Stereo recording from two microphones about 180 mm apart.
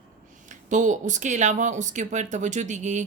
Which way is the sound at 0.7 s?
45° right (ahead or behind).